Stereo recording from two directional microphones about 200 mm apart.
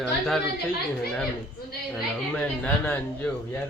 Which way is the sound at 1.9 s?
5° left (ahead or behind).